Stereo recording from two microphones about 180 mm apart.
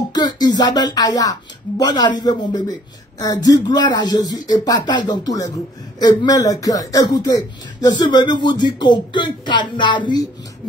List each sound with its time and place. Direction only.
0.1 s speech: 25° left (ahead or behind)